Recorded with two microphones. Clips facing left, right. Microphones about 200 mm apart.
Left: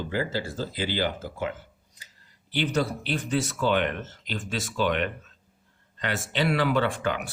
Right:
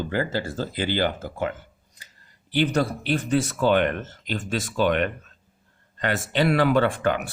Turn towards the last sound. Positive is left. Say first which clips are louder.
# right 4 dB
turn(degrees=-50)  # may be behind; listen again after turning